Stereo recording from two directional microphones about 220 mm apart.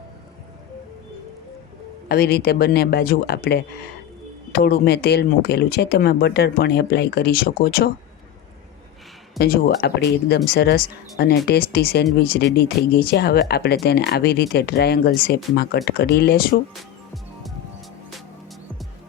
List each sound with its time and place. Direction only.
2.0 s speech: 45° left (ahead or behind)
9.4 s speech: 45° left (ahead or behind)